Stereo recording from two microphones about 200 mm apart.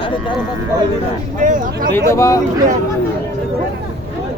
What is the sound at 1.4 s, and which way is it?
Speech, 40° right (ahead or behind).